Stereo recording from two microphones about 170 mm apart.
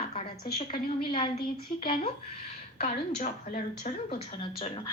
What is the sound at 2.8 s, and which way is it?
Speech, 45° left (ahead or behind).